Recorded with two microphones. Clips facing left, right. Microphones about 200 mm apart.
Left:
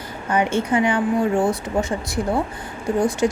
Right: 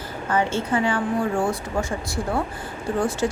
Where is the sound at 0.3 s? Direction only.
15° left (ahead or behind).